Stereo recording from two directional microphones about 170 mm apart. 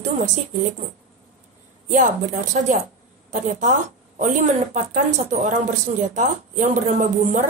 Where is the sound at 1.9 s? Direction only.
45° right (ahead or behind).